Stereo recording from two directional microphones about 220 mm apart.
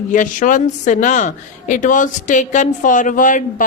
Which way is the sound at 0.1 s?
35° left (ahead or behind).